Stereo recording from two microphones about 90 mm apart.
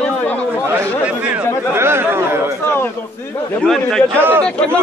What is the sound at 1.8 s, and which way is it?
Chatter, 25° right (ahead or behind).